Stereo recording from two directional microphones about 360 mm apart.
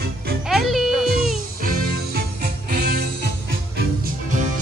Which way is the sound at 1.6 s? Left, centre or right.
Right.